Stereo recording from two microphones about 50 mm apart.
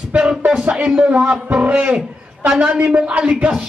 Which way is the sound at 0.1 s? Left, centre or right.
Right.